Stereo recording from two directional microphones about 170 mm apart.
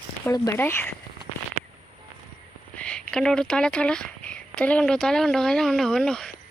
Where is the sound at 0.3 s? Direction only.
20° left (ahead or behind).